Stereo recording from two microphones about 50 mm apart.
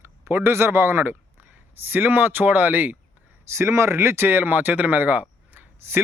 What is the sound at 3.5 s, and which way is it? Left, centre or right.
Speech, right.